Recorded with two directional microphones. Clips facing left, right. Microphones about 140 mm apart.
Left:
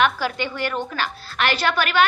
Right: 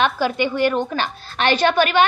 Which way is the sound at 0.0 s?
20° right (ahead or behind).